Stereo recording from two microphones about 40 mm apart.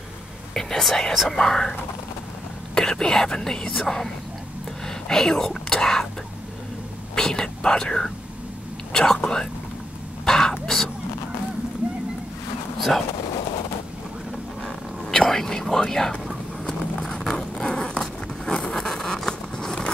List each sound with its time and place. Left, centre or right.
0.6 s whispering: centre
1.3 s speech: centre
4.8 s whispering: centre
7.2 s speech: centre
10.2 s a sound: centre
14.6 s whispering: centre
17.0 s a sound: centre